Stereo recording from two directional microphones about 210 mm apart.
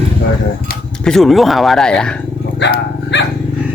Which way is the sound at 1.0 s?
Centre (ahead or behind).